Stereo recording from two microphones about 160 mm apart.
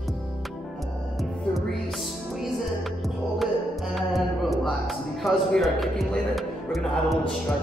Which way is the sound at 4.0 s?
Centre (ahead or behind).